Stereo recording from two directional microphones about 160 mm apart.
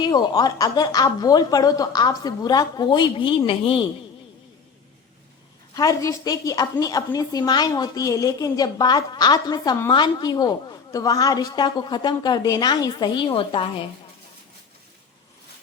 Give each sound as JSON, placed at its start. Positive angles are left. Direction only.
{"t": 0.0, "sound": "a woman's voice", "side_deg": 25}
{"t": 5.7, "sound": "a woman's voice", "side_deg": 20}